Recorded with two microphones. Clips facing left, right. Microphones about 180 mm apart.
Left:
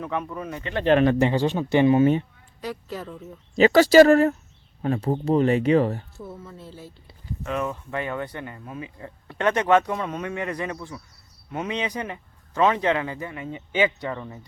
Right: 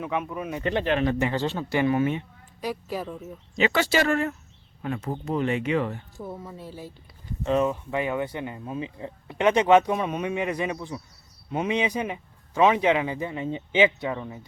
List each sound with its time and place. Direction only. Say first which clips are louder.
0.0 s speech: even; 10° right (ahead or behind)
1.3 s speech: left 5 dB; 15° left (ahead or behind)
2.6 s speech: right 2 dB; 10° right (ahead or behind)
3.5 s speech: left 9 dB; 40° left (ahead or behind)
6.1 s speech: right 2 dB; 15° right (ahead or behind)
7.4 s speech: right 5 dB; 30° right (ahead or behind)
7.7 s speech: right 2 dB; 15° right (ahead or behind)
14.0 s speech: right 1 dB; 10° right (ahead or behind)